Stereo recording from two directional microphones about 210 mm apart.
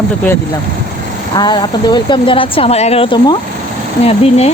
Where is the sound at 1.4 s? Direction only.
20° left (ahead or behind).